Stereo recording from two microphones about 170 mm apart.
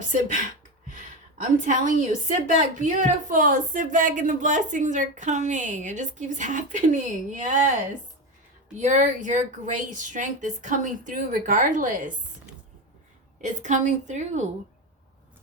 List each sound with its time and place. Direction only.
1.4 s a woman's voice: 50° right (ahead or behind)
8.8 s a woman's voice: 45° right (ahead or behind)
13.4 s a woman's voice: 45° right (ahead or behind)